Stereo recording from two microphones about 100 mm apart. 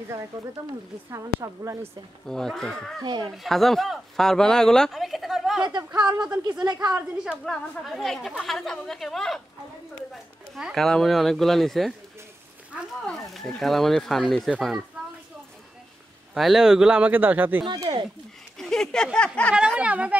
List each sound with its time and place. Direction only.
0.3 s speech: 35° right (ahead or behind)
2.2 s a woman's voice: 5° left (ahead or behind)
3.0 s a woman's voice: 45° right (ahead or behind)
3.3 s speech: centre (ahead or behind)
5.8 s speech: 40° right (ahead or behind)
6.0 s speech: 10° right (ahead or behind)
6.6 s a woman's voice: 45° right (ahead or behind)
7.4 s a woman's voice: 5° left (ahead or behind)
10.5 s a woman's voice: centre (ahead or behind)
13.0 s a woman's voice: 5° left (ahead or behind)
16.3 s speech: centre (ahead or behind); by 17.6 s 15° right (ahead or behind)
17.9 s a woman's voice: 45° right (ahead or behind)
18.6 s speech: 5° left (ahead or behind)
19.5 s speech: 10° right (ahead or behind)